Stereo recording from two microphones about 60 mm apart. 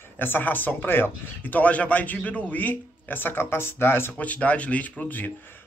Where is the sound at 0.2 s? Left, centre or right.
Left.